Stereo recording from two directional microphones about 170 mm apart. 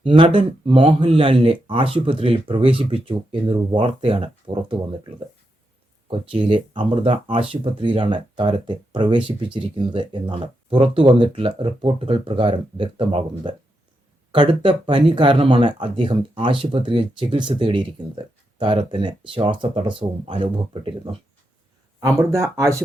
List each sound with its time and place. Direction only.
0.0 s speech: 30° right (ahead or behind)
6.1 s speech: 30° right (ahead or behind)
22.0 s speech: 15° right (ahead or behind)